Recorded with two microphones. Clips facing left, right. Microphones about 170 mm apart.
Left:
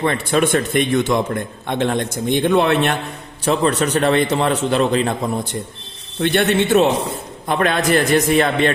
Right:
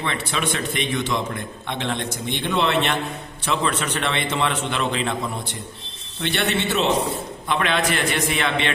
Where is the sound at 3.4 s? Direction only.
40° left (ahead or behind).